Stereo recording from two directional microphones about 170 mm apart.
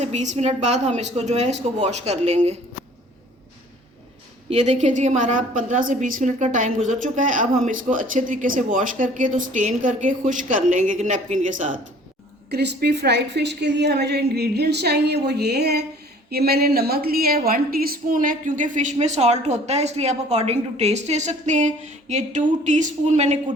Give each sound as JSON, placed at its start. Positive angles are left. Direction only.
{"t": 0.0, "sound": "a woman's voice", "side_deg": -45}
{"t": 4.4, "sound": "a woman's voice", "side_deg": -45}
{"t": 12.5, "sound": "a woman's voice", "side_deg": -70}